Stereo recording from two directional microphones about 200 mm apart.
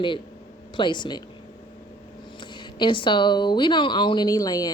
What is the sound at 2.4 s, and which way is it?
Speech, 25° left (ahead or behind).